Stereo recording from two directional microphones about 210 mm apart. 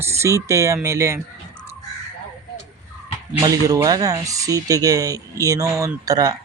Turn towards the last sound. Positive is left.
turn(degrees=-15)  # may be behind; listen again after turning